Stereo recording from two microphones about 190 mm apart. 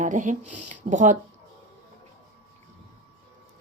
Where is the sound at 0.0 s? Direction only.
40° right (ahead or behind).